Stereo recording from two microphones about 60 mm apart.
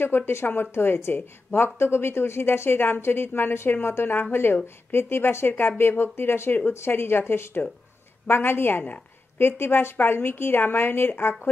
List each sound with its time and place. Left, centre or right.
0.0 s a woman's voice: left